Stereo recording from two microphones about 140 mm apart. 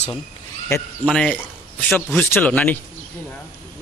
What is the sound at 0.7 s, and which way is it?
Speech, 20° left (ahead or behind).